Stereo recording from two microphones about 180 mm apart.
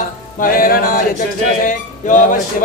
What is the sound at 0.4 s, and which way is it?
Speech, 55° left (ahead or behind).